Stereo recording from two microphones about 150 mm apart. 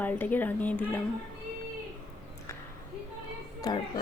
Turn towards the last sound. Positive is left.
turn(degrees=30)  # may be behind; listen again after turning